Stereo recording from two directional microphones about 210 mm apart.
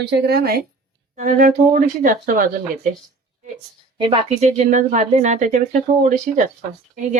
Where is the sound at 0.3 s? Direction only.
45° right (ahead or behind).